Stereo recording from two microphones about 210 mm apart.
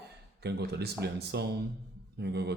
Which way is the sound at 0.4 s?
50° right (ahead or behind).